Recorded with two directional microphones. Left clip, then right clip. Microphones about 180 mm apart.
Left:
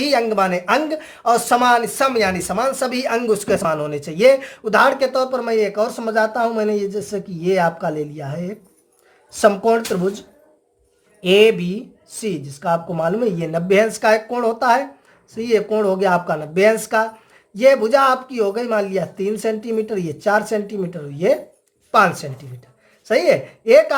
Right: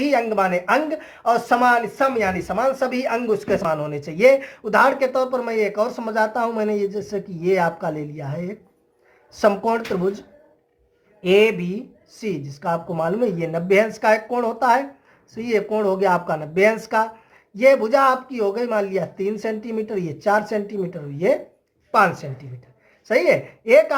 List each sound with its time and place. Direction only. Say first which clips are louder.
0.0 s speech: left 2 dB; 30° left (ahead or behind)